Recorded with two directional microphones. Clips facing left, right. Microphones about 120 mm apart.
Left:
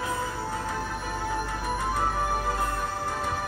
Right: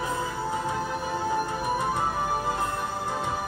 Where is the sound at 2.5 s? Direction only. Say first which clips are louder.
Even; 20° right (ahead or behind).